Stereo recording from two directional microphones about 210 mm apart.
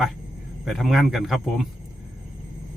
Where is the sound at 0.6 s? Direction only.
Centre (ahead or behind).